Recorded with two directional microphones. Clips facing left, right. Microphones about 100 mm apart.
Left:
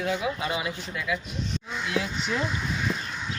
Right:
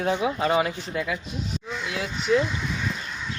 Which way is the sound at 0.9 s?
30° right (ahead or behind).